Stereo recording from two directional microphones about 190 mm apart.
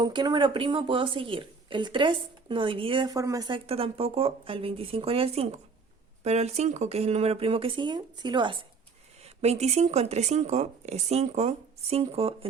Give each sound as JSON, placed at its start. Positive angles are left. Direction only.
{"t": 0.0, "sound": "a woman's voice", "side_deg": -25}
{"t": 9.2, "sound": "speech", "side_deg": -35}